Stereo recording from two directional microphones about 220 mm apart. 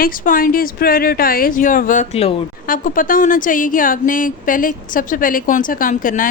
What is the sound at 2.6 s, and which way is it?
A woman's voice, 40° left (ahead or behind).